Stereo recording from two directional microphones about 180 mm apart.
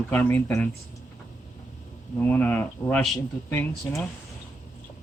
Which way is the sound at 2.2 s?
10° left (ahead or behind).